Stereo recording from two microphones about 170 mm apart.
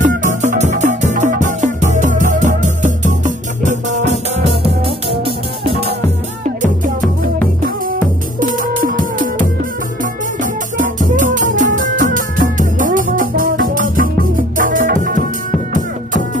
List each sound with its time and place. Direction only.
0.0 s music: 50° right (ahead or behind)
5.2 s music: 35° right (ahead or behind)
8.4 s music: 55° right (ahead or behind)